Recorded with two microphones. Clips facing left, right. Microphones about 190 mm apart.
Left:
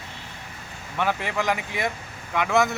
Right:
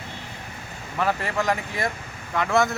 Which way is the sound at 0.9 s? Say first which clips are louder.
Right 1 dB; centre (ahead or behind).